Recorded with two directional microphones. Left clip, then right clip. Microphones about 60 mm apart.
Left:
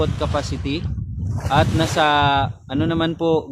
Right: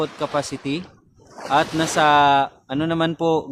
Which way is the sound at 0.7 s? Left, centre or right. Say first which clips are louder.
Left 1 dB; right.